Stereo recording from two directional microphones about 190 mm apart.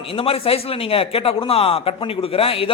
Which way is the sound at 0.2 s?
30° left (ahead or behind).